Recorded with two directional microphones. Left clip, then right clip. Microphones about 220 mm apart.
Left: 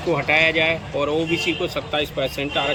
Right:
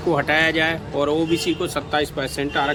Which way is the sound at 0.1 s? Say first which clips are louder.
Left 1 dB; 20° right (ahead or behind).